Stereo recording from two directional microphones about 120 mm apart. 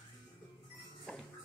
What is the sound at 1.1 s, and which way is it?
Music, 5° left (ahead or behind).